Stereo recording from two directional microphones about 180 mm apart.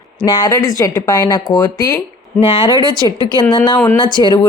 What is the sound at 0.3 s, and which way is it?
A woman's voice, 25° left (ahead or behind).